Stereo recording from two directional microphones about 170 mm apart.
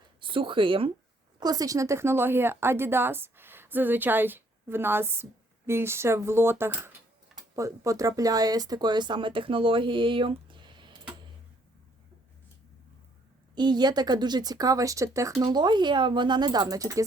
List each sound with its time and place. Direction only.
0.2 s speech: 30° right (ahead or behind)
13.6 s speech: 25° right (ahead or behind)